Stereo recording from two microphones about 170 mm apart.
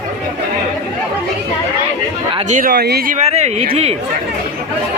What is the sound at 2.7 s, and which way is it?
Speech, 70° right (ahead or behind).